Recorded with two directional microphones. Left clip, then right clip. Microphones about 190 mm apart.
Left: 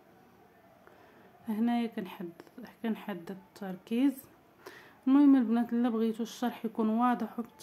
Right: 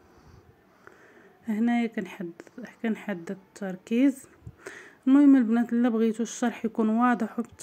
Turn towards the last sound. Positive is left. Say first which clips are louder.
# right 5 dB
turn(degrees=-20)  # may be behind; listen again after turning